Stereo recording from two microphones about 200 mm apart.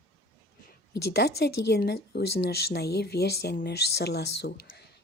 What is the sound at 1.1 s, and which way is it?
A woman's voice, 55° left (ahead or behind).